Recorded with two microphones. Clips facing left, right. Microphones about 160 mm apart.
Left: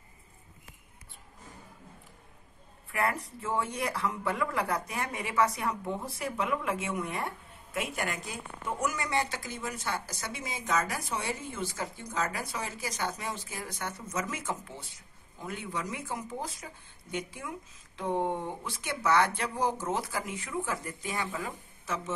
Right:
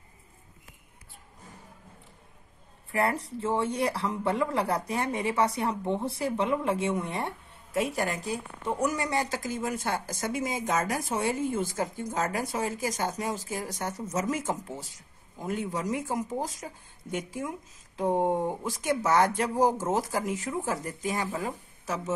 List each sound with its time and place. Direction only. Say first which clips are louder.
2.9 s speech: right 4 dB; 30° right (ahead or behind)